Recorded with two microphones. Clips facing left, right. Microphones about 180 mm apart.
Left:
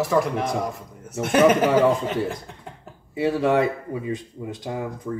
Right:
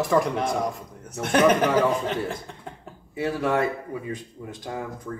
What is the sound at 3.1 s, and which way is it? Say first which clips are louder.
Speech: left 4 dB; 20° left (ahead or behind).